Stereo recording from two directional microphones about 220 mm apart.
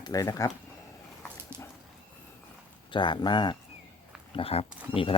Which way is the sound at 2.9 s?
20° left (ahead or behind).